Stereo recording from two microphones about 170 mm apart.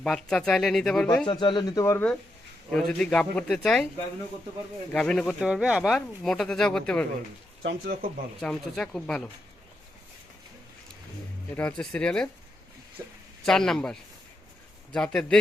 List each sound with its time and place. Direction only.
0.0 s speech: 5° left (ahead or behind)
1.2 s speech: 30° left (ahead or behind)
2.7 s speech: 5° left (ahead or behind)
4.9 s speech: 5° left (ahead or behind)
7.6 s speech: 90° right
8.4 s speech: 5° left (ahead or behind)
11.5 s speech: 5° left (ahead or behind)
13.4 s speech: 5° left (ahead or behind)